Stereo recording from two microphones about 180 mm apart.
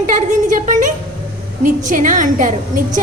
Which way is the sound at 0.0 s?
45° right (ahead or behind).